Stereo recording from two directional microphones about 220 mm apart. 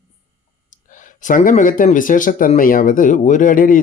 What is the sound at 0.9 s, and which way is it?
Speech, 35° left (ahead or behind).